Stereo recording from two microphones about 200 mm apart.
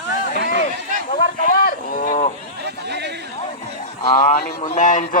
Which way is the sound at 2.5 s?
55° right (ahead or behind).